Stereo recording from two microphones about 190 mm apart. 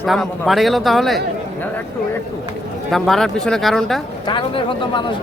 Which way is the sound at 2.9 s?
Centre (ahead or behind).